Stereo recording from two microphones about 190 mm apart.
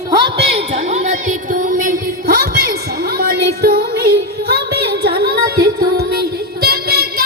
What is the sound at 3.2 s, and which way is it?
Music, 55° right (ahead or behind).